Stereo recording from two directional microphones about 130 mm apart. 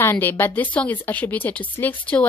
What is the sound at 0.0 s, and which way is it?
Speech, 15° left (ahead or behind).